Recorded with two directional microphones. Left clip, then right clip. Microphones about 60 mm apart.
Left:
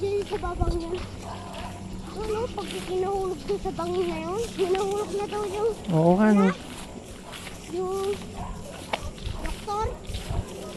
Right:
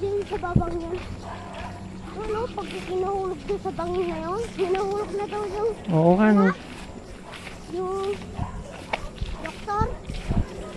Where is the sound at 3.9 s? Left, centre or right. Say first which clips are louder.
Right 1 dB; left; by 6.0 s centre.